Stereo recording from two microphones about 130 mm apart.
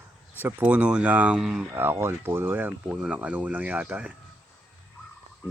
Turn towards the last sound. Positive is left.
turn(degrees=-10)  # may be behind; listen again after turning